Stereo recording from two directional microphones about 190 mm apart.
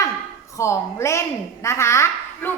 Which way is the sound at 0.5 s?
15° left (ahead or behind).